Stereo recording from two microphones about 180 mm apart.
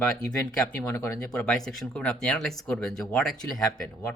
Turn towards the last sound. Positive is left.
turn(degrees=5)  # may be behind; listen again after turning